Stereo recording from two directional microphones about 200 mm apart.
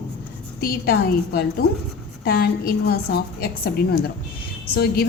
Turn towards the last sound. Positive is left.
turn(degrees=55)  # may be behind; listen again after turning